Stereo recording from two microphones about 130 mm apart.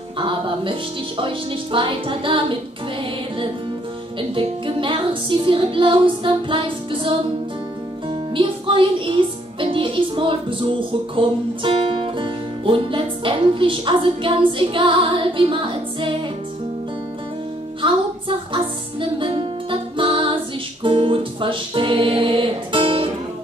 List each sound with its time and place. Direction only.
0.2 s music: 40° right (ahead or behind)
4.2 s music: 40° right (ahead or behind)
18.5 s music: 40° right (ahead or behind)